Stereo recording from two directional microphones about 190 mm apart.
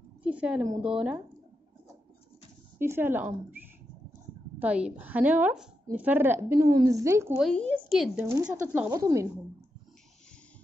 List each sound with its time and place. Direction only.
0.2 s a woman's voice: 5° right (ahead or behind)
2.8 s a woman's voice: 10° right (ahead or behind)
3.6 s a sound: 10° right (ahead or behind)
4.6 s a woman's voice: 5° right (ahead or behind)
7.3 s a woman's voice: 5° left (ahead or behind)
8.3 s a woman's voice: 10° right (ahead or behind)